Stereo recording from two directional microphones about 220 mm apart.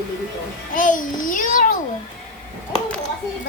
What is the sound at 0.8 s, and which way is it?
Speech, 35° left (ahead or behind).